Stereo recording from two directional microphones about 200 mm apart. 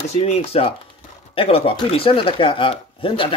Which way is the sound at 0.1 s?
35° left (ahead or behind).